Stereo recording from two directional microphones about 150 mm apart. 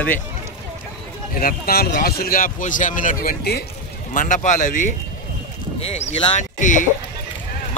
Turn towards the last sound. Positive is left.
turn(degrees=60)  # may be behind; listen again after turning